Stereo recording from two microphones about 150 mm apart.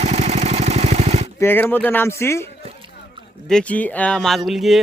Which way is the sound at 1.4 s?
15° left (ahead or behind).